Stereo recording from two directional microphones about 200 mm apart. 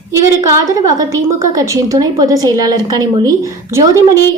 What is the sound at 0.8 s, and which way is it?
A woman's voice, 15° right (ahead or behind).